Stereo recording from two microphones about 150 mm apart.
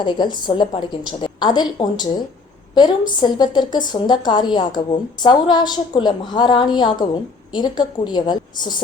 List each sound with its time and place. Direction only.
0.0 s a woman's voice: 30° left (ahead or behind)